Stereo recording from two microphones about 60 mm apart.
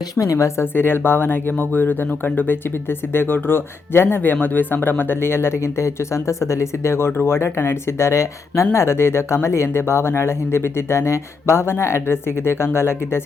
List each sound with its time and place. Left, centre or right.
0.2 s speech: left
0.6 s speech: left